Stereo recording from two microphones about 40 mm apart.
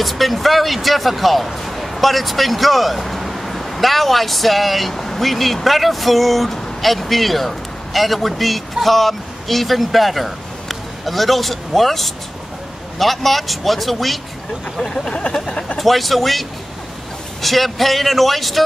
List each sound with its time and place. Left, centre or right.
0.0 s speech: centre
14.8 s speech: centre
15.8 s speech: centre